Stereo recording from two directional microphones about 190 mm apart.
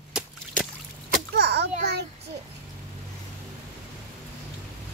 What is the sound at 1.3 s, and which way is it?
Children playing, 60° right (ahead or behind).